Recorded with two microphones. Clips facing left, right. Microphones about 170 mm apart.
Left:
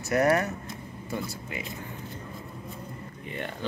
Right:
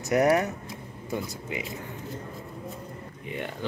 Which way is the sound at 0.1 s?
15° right (ahead or behind).